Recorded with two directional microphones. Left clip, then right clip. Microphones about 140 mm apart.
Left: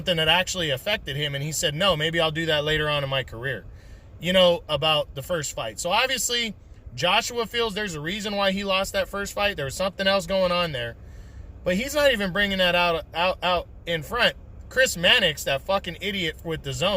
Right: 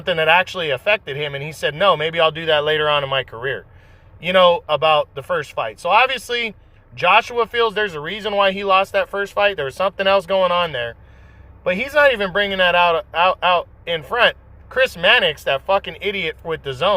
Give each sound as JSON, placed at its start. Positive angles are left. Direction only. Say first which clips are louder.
{"t": 0.1, "sound": "speech", "louder": "right 6 dB", "side_deg": 20}